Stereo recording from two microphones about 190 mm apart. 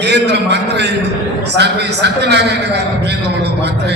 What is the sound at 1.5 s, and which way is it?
Speech, 65° right (ahead or behind).